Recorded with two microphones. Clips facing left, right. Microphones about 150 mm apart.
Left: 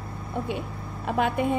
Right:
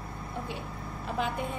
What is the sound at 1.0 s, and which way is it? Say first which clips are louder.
Speech: left 8 dB; 65° left (ahead or behind).